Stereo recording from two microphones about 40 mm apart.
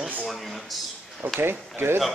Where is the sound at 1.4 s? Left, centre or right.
Right.